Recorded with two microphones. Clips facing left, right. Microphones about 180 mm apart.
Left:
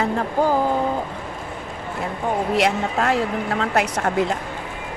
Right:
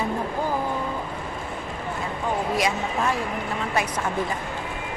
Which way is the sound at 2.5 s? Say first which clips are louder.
Left 4 dB; 70° left (ahead or behind).